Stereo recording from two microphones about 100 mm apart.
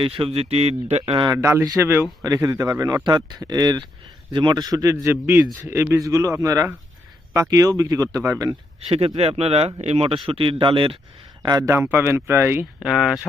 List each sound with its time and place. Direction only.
0.3 s speech: 90° right
1.3 s a man's voice: 25° right (ahead or behind)
3.0 s a man's voice: 45° right (ahead or behind)
8.9 s speech: 80° right
10.2 s speech: 65° right (ahead or behind)
11.4 s a man's voice: 35° right (ahead or behind)
11.7 s speech: 25° right (ahead or behind)
12.8 s speech: 5° right (ahead or behind)